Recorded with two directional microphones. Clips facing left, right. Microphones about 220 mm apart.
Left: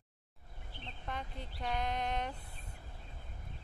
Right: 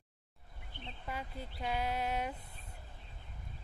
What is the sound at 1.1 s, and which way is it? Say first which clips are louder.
Speech: right 1 dB; 5° right (ahead or behind).